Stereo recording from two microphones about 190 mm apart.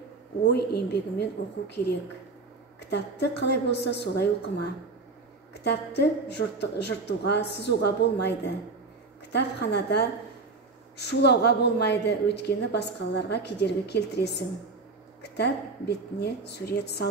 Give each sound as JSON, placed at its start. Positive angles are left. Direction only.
{"t": 0.5, "sound": "a woman's voice", "side_deg": 60}
{"t": 2.9, "sound": "a woman's voice", "side_deg": 60}
{"t": 5.5, "sound": "a woman's voice", "side_deg": 60}